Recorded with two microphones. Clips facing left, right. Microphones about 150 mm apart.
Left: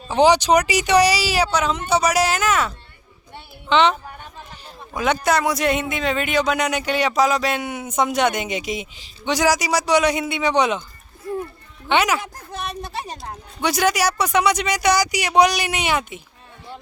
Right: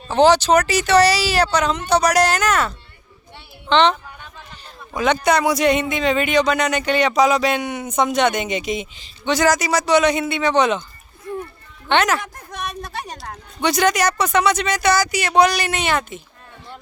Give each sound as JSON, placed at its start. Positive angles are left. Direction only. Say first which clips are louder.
{"t": 0.1, "sound": "speech", "louder": "right 1 dB", "side_deg": 10}
{"t": 4.9, "sound": "speech", "louder": "right 2 dB", "side_deg": 5}
{"t": 11.9, "sound": "speech", "louder": "right 1 dB", "side_deg": 10}
{"t": 12.2, "sound": "speech", "louder": "even", "side_deg": 30}
{"t": 13.3, "sound": "speech", "louder": "right 3 dB", "side_deg": 10}